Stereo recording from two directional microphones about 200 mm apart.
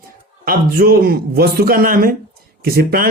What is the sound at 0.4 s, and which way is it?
Speech, 50° right (ahead or behind).